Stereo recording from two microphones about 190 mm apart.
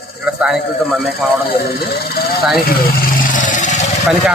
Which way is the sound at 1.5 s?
55° left (ahead or behind).